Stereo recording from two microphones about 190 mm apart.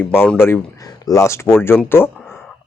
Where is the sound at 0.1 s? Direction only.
10° left (ahead or behind).